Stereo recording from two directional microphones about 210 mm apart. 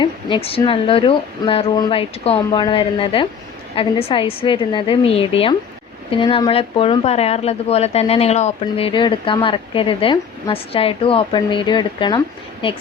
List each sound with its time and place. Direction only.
0.0 s a woman's voice: 25° left (ahead or behind)